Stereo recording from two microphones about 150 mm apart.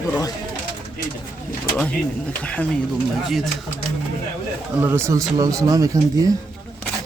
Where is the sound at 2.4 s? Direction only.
10° left (ahead or behind).